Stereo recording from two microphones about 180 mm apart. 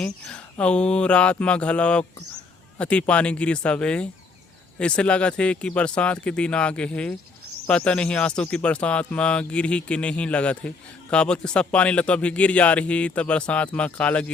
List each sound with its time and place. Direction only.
0.3 s speech: 5° left (ahead or behind)